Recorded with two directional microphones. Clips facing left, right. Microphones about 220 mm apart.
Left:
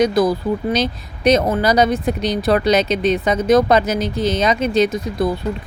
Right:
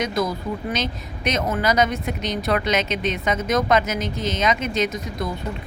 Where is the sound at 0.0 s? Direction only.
35° left (ahead or behind).